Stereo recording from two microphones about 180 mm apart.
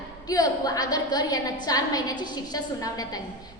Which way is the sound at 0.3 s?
20° left (ahead or behind).